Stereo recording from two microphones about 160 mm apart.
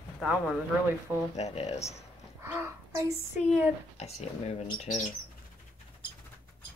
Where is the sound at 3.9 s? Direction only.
40° left (ahead or behind).